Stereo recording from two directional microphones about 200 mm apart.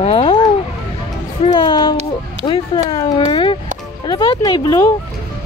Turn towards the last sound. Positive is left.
turn(degrees=20)  # may be behind; listen again after turning